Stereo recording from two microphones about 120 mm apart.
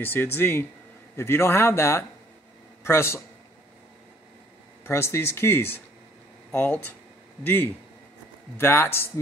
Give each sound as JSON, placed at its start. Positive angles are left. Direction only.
{"t": 0.0, "sound": "speech", "side_deg": 15}
{"t": 4.8, "sound": "speech", "side_deg": 20}